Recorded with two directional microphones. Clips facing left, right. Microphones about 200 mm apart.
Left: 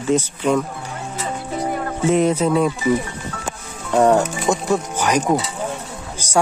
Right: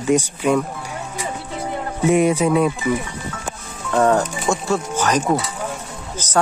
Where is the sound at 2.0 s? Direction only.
10° right (ahead or behind).